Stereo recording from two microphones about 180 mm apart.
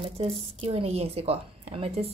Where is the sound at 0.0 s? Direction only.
30° right (ahead or behind).